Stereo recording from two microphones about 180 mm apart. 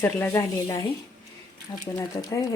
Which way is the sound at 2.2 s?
20° left (ahead or behind).